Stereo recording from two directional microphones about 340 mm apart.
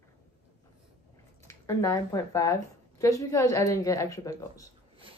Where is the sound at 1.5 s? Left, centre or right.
Centre.